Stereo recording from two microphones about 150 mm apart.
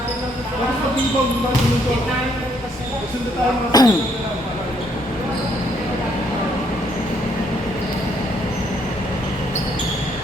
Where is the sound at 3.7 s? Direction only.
25° left (ahead or behind).